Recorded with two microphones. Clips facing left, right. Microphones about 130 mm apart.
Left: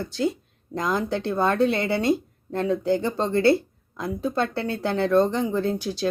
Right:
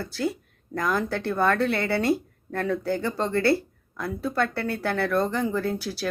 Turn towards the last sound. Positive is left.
turn(degrees=20)  # may be behind; listen again after turning